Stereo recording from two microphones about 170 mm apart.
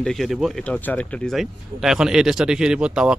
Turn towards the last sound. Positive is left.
turn(degrees=-5)  # may be behind; listen again after turning